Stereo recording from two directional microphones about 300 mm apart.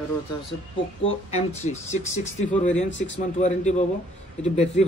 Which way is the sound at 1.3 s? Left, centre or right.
Left.